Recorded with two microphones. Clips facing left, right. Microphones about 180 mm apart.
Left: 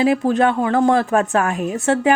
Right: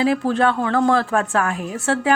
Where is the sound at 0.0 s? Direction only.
15° left (ahead or behind).